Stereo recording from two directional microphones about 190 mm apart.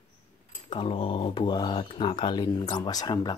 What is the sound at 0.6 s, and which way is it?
Speech, 25° left (ahead or behind).